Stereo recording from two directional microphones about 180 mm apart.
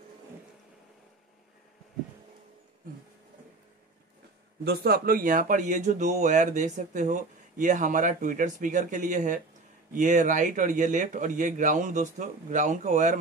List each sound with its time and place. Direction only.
4.6 s speech: 60° right (ahead or behind)